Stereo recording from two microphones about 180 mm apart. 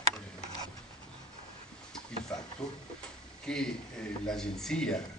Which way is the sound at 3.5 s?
5° left (ahead or behind).